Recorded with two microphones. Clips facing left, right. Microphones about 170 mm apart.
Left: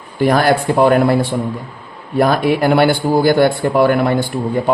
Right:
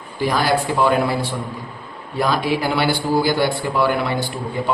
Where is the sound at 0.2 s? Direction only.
55° left (ahead or behind).